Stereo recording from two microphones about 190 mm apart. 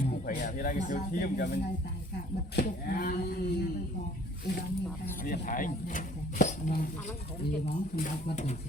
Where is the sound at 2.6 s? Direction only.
50° left (ahead or behind).